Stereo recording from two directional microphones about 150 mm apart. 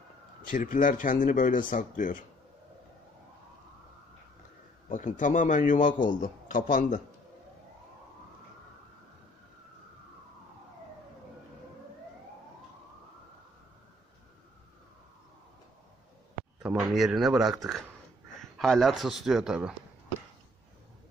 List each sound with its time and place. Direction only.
0.5 s a man's voice: 65° left (ahead or behind)
4.8 s a man's voice: 55° left (ahead or behind)
16.6 s speech: 5° right (ahead or behind)